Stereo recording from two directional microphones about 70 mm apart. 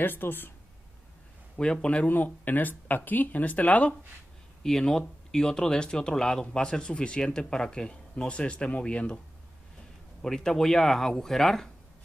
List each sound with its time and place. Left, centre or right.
0.0 s speech: left
1.6 s speech: centre
2.0 s speech: left
4.6 s speech: centre
10.2 s speech: centre